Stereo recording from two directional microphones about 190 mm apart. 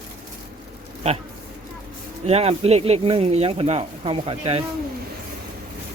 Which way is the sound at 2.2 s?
35° right (ahead or behind).